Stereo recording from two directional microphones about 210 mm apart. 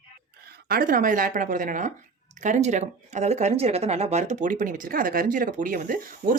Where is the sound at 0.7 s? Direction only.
40° right (ahead or behind).